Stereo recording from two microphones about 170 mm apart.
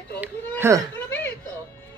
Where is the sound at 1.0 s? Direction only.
15° left (ahead or behind).